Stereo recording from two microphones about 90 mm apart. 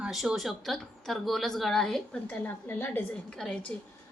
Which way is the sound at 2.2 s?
20° left (ahead or behind).